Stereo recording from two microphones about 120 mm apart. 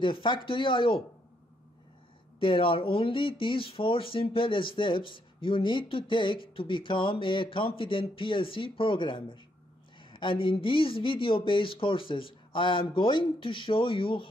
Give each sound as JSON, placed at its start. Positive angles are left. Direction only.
{"t": 0.0, "sound": "speech", "side_deg": 45}
{"t": 2.4, "sound": "speech", "side_deg": 50}